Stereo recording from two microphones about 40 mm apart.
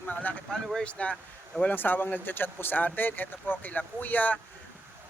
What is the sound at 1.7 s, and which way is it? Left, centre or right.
Speech, left.